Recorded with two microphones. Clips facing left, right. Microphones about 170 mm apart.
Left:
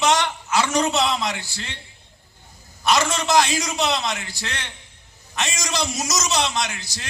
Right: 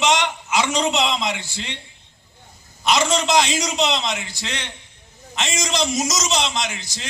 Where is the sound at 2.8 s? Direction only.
15° right (ahead or behind).